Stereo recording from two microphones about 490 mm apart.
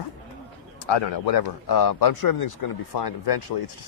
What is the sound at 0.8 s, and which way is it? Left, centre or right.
Speech, left.